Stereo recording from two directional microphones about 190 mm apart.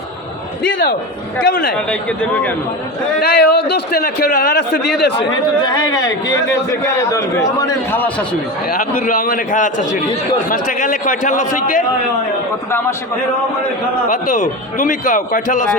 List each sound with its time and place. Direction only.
1.9 s a man's voice: 5° left (ahead or behind)
3.2 s a man's voice: 60° left (ahead or behind)
5.3 s a man's voice: 20° left (ahead or behind)
8.7 s a man's voice: 50° left (ahead or behind)
14.1 s a man's voice: 40° left (ahead or behind)